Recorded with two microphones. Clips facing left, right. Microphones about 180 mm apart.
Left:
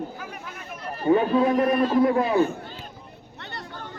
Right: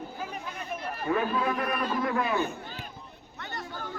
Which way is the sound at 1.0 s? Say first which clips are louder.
Left 9 dB; 30° left (ahead or behind).